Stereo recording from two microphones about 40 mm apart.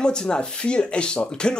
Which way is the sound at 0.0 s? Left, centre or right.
Centre.